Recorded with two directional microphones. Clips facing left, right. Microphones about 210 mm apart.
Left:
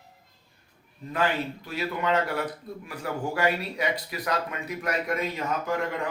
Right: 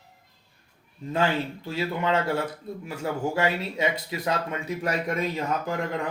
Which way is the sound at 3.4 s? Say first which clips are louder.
Right 1 dB; 25° right (ahead or behind).